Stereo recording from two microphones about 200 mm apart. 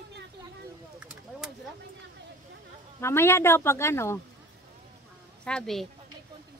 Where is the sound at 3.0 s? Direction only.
15° left (ahead or behind).